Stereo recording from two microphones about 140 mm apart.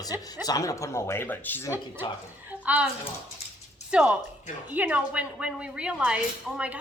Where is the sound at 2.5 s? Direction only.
10° right (ahead or behind).